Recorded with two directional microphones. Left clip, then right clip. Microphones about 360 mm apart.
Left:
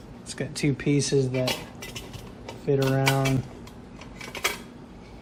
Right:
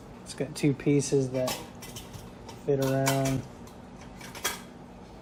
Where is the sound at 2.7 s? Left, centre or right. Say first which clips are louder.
Left 3 dB; left.